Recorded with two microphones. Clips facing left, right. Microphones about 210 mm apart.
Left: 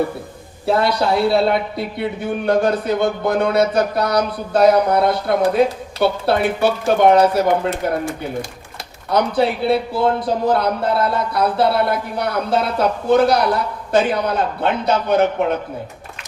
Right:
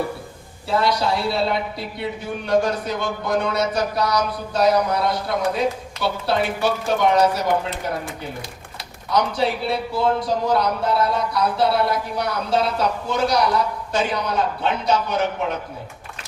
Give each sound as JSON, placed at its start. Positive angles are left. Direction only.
{"t": 0.7, "sound": "speech", "side_deg": 55}